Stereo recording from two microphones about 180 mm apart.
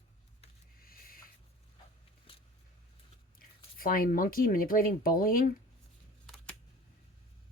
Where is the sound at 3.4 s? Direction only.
55° left (ahead or behind).